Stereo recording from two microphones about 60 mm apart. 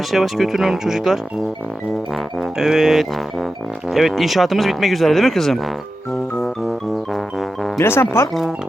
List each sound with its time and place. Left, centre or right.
0.1 s speech: centre
2.4 s speech: centre
6.4 s music: centre
7.8 s speech: left